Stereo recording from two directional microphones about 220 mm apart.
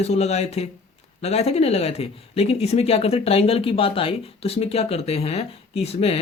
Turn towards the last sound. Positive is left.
turn(degrees=25)  # may be behind; listen again after turning